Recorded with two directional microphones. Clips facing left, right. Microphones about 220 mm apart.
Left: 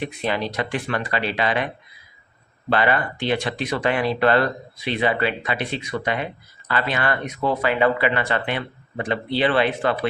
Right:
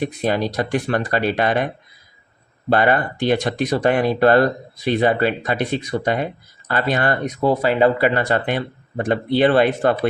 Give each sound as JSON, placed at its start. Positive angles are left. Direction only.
{"t": 0.0, "sound": "speech", "side_deg": -40}